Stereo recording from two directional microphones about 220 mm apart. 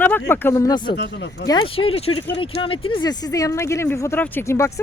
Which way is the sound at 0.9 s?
50° left (ahead or behind).